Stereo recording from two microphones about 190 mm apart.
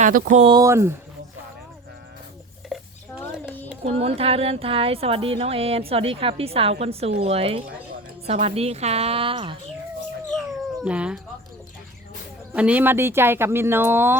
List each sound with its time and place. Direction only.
0.0 s speech: 45° right (ahead or behind)
0.4 s speech: 20° right (ahead or behind)
2.7 s a sound: centre (ahead or behind)
3.8 s a woman's voice: 30° right (ahead or behind)
10.8 s speech: 5° right (ahead or behind)
12.5 s speech: 5° right (ahead or behind)